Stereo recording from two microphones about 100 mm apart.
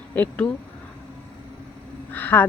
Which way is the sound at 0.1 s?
15° left (ahead or behind).